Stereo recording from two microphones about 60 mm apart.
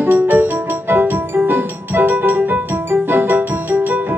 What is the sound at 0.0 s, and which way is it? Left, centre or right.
Music, right.